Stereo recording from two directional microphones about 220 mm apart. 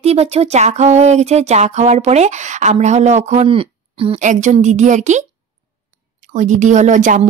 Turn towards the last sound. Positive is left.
turn(degrees=-35)  # may be behind; listen again after turning